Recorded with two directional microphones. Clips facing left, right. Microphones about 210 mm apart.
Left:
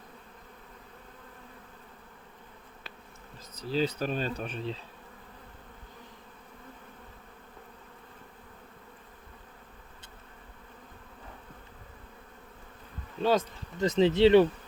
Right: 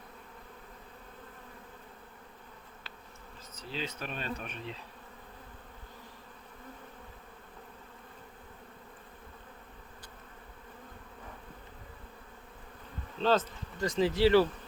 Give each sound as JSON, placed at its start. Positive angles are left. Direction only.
{"t": 3.5, "sound": "bee", "side_deg": 40}
{"t": 13.1, "sound": "speech", "side_deg": 10}